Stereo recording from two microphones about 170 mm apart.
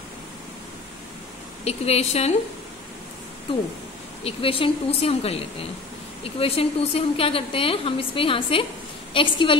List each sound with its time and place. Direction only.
1.6 s a woman's voice: 40° left (ahead or behind)
4.2 s a woman's voice: 35° left (ahead or behind)